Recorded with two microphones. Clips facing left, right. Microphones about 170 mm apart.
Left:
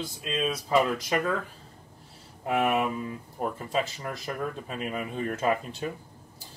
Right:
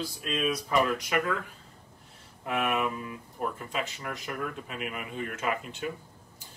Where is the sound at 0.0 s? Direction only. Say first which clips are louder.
Even; 25° left (ahead or behind).